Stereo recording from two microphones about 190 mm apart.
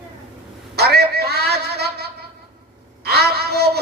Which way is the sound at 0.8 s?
60° right (ahead or behind).